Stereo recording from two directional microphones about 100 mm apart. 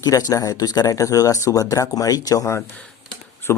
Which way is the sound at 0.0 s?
40° left (ahead or behind).